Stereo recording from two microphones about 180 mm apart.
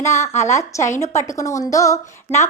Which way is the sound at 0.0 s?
15° left (ahead or behind).